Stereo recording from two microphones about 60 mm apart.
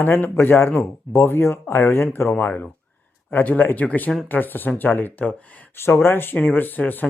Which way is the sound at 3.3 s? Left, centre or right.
Left.